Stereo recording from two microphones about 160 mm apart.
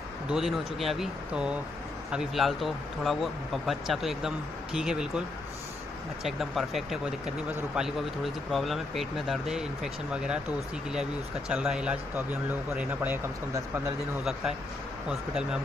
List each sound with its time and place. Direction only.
0.3 s speech: centre (ahead or behind)
6.2 s speech: centre (ahead or behind)
15.0 s speech: 5° right (ahead or behind)